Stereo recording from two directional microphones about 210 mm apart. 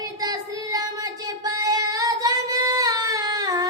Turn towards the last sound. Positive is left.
turn(degrees=-20)  # may be behind; listen again after turning